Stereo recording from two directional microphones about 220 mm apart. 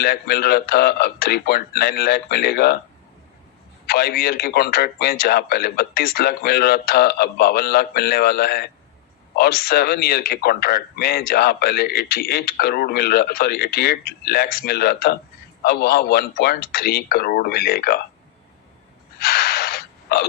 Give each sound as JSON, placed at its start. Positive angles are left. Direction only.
{"t": 0.0, "sound": "a man's voice", "side_deg": 45}
{"t": 3.8, "sound": "a man's voice", "side_deg": 45}
{"t": 19.2, "sound": "gasp", "side_deg": 45}